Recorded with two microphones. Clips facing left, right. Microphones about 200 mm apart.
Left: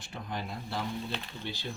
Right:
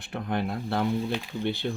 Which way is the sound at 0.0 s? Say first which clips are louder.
Right 9 dB; 60° right (ahead or behind).